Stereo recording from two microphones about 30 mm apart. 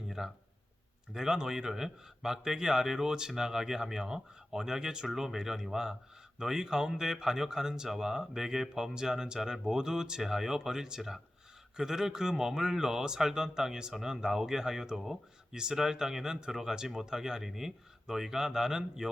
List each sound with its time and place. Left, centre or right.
0.2 s speech: centre